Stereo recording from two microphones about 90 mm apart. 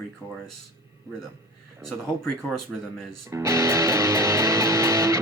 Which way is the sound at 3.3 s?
35° right (ahead or behind).